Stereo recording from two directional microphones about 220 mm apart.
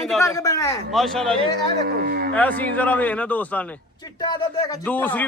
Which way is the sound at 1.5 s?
45° right (ahead or behind).